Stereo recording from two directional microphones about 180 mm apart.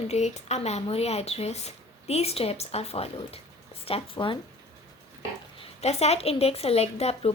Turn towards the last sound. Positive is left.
turn(degrees=35)  # may be behind; listen again after turning